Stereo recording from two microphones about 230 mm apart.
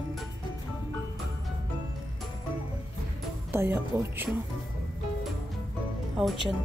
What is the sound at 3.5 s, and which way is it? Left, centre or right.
Speech, centre.